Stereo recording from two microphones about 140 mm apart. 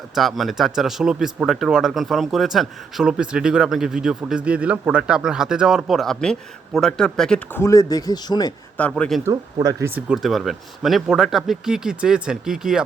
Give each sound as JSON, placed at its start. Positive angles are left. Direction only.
{"t": 0.1, "sound": "speech", "side_deg": 0}
{"t": 8.8, "sound": "speech", "side_deg": 5}
{"t": 9.2, "sound": "speech", "side_deg": -25}
{"t": 9.9, "sound": "speech", "side_deg": -5}